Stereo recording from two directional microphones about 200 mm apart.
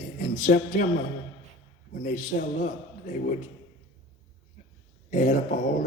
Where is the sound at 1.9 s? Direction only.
40° left (ahead or behind).